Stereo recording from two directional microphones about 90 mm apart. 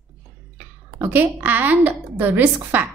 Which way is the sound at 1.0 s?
20° right (ahead or behind).